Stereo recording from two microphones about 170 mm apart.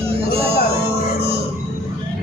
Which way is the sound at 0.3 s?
35° right (ahead or behind).